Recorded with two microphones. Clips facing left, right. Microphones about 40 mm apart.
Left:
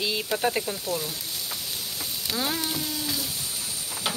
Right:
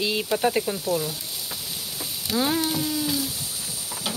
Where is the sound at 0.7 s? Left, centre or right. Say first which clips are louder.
Right 4 dB; centre.